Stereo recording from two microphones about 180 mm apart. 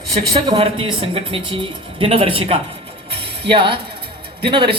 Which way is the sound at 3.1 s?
30° right (ahead or behind).